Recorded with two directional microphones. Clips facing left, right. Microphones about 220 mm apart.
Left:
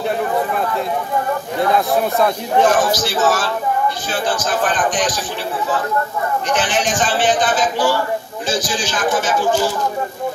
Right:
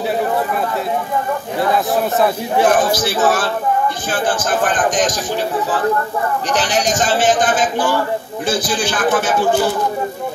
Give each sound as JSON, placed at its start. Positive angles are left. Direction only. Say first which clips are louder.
{"t": 2.1, "sound": "speech", "louder": "even", "side_deg": -5}
{"t": 2.9, "sound": "speech", "louder": "right 1 dB", "side_deg": -55}
{"t": 6.5, "sound": "a man's voice", "louder": "right 1 dB", "side_deg": -40}